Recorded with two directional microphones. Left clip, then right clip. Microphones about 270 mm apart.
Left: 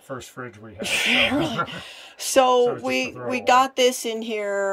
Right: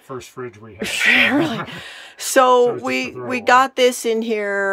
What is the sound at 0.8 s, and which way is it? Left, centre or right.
Speech, centre.